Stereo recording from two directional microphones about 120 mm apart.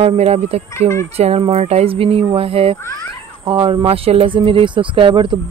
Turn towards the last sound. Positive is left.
turn(degrees=-45)  # may be behind; listen again after turning